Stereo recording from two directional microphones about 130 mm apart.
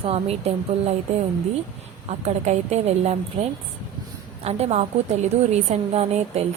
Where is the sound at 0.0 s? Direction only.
50° right (ahead or behind).